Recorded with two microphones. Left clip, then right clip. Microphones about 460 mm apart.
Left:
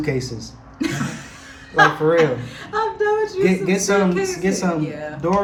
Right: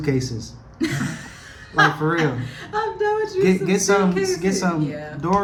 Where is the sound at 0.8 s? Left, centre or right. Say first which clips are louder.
Even; centre.